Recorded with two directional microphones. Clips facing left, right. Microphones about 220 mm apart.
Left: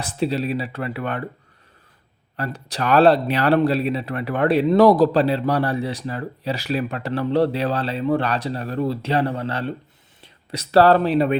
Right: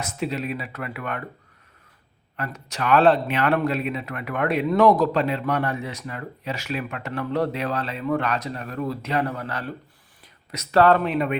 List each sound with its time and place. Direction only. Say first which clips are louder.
0.0 s speech: left 5 dB; 30° left (ahead or behind)
2.3 s speech: left 4 dB; 35° left (ahead or behind)